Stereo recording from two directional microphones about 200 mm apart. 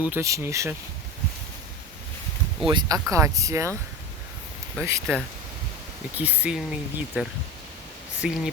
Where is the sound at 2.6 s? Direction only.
20° right (ahead or behind).